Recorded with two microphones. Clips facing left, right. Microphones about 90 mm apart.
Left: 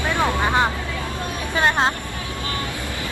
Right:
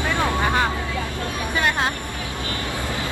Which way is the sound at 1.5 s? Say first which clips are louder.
Left 4 dB; 25° left (ahead or behind).